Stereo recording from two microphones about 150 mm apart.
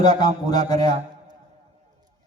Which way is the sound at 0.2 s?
25° left (ahead or behind).